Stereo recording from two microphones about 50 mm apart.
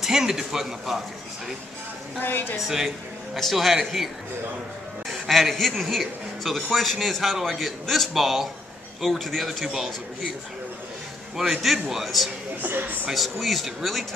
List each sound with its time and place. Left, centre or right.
0.0 s a man's voice: centre
2.1 s a woman's voice: left
3.3 s a man's voice: centre
5.3 s a man's voice: centre
11.3 s a man's voice: centre
12.6 s speech: right
13.1 s a man's voice: centre